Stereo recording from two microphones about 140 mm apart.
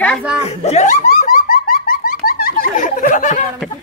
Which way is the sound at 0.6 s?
55° left (ahead or behind).